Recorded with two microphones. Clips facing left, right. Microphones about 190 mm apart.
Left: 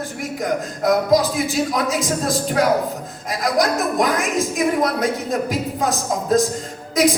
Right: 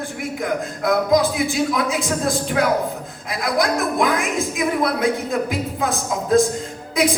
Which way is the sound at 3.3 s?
40° left (ahead or behind).